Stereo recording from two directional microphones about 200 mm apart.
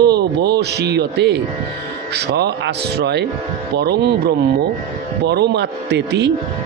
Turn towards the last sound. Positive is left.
turn(degrees=-60)  # may be behind; listen again after turning